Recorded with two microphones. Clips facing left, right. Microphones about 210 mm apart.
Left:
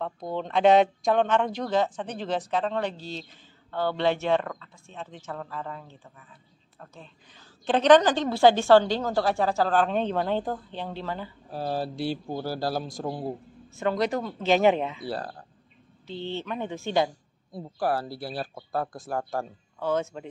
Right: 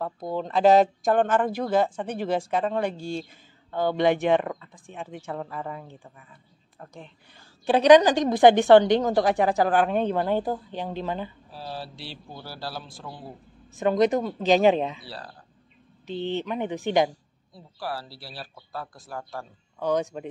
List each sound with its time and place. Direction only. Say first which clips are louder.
0.0 s a woman's voice: right 2 dB; 5° right (ahead or behind)
11.5 s speech: left 10 dB; 50° left (ahead or behind)
13.7 s a woman's voice: right 5 dB; 20° right (ahead or behind)
15.0 s speech: left 8 dB; 50° left (ahead or behind)
16.1 s a woman's voice: right 4 dB; 15° right (ahead or behind)
17.5 s speech: left 7 dB; 50° left (ahead or behind)
19.8 s a woman's voice: right 2 dB; 15° right (ahead or behind)